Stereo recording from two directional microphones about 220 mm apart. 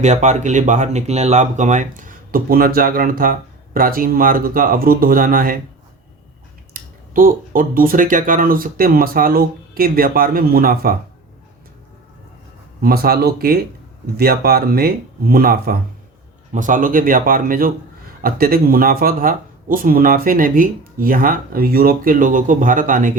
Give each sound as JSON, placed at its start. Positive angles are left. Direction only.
{"t": 0.0, "sound": "speech", "side_deg": -30}
{"t": 6.7, "sound": "speech", "side_deg": -40}
{"t": 12.8, "sound": "speech", "side_deg": -45}